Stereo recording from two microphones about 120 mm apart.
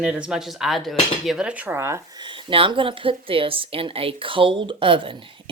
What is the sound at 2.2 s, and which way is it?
Speech, 40° right (ahead or behind).